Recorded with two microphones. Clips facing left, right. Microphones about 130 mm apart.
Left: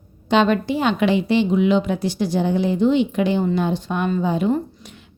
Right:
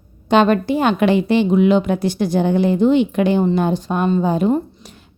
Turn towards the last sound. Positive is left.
turn(degrees=-35)  # may be behind; listen again after turning